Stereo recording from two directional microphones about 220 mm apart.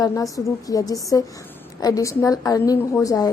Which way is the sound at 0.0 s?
15° left (ahead or behind).